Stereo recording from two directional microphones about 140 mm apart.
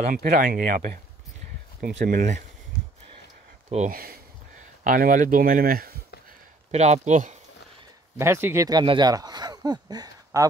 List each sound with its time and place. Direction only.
0.1 s speech: 75° right (ahead or behind)
1.8 s speech: 85° right
3.9 s speech: 90° right
6.7 s speech: 55° right (ahead or behind)
8.2 s speech: 15° right (ahead or behind)
8.6 s speech: 30° right (ahead or behind)